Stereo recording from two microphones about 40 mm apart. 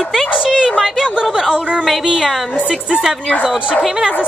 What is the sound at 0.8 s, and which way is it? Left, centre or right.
A woman's voice, centre.